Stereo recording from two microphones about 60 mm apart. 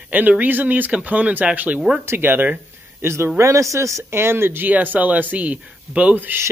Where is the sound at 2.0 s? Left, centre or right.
Right.